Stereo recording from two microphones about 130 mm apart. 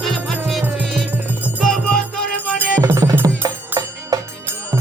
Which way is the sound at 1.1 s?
10° right (ahead or behind).